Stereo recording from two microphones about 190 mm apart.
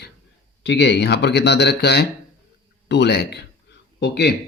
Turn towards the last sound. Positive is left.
turn(degrees=60)  # may be behind; listen again after turning